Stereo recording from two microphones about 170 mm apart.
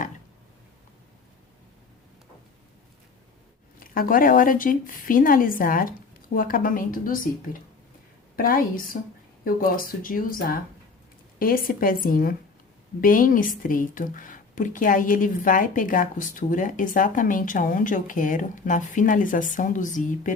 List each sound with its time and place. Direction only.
3.8 s speech: 55° left (ahead or behind)
8.4 s a woman's voice: 55° left (ahead or behind)